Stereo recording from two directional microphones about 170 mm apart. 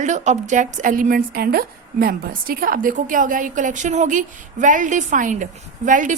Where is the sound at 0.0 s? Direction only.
45° right (ahead or behind).